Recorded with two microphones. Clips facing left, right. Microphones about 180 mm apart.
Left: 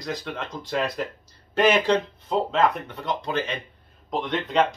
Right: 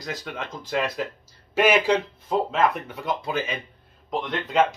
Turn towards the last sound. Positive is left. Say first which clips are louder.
# even
turn(degrees=0)  # may be behind; listen again after turning